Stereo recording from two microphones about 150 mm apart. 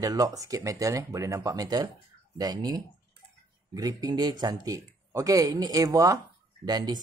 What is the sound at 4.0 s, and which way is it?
Speech, 25° right (ahead or behind).